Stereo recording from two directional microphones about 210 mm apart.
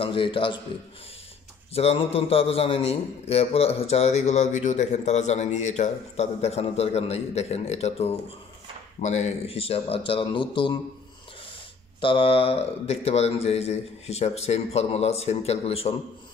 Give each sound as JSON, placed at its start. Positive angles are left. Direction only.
{"t": 0.0, "sound": "a man's voice", "side_deg": 25}
{"t": 1.7, "sound": "a man's voice", "side_deg": 30}
{"t": 12.0, "sound": "speech", "side_deg": 25}